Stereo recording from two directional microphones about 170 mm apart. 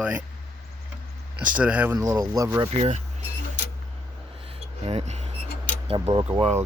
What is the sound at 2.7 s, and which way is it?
Speech, 40° right (ahead or behind).